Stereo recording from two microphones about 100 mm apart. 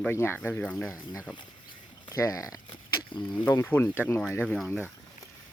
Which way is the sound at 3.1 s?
50° left (ahead or behind).